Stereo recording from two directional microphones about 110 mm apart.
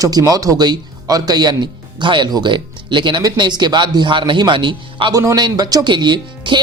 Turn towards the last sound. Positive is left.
turn(degrees=-45)  # may be behind; listen again after turning